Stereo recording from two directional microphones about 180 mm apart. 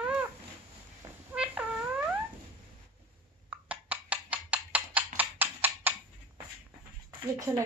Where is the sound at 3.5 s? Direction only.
10° right (ahead or behind).